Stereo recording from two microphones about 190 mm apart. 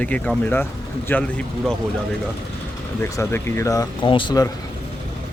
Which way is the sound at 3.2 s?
15° left (ahead or behind).